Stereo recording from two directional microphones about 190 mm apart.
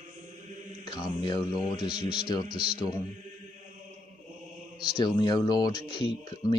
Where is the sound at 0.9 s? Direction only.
20° left (ahead or behind).